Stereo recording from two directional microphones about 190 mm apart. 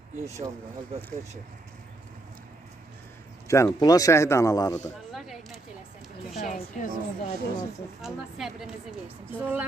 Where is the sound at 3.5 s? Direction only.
15° left (ahead or behind).